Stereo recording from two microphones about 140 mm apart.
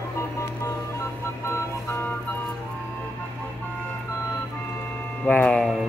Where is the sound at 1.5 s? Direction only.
20° left (ahead or behind).